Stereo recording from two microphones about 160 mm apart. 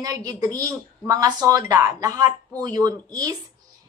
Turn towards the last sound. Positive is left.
turn(degrees=-25)  # may be behind; listen again after turning